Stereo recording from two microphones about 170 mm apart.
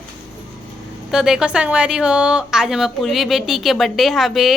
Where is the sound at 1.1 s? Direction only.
5° right (ahead or behind).